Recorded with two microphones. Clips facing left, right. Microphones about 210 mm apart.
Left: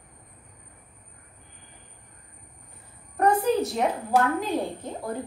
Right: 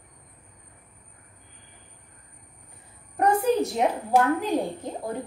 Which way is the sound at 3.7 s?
15° right (ahead or behind).